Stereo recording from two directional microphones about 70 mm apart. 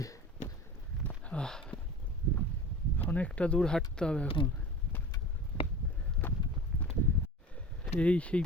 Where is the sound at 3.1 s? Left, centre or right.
Left.